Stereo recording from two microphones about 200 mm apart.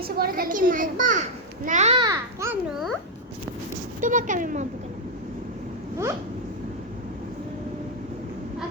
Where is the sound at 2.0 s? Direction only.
15° right (ahead or behind).